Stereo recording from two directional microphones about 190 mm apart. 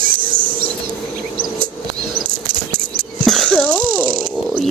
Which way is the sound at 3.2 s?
5° left (ahead or behind).